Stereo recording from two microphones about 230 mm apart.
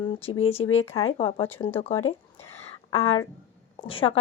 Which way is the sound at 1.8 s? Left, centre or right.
Left.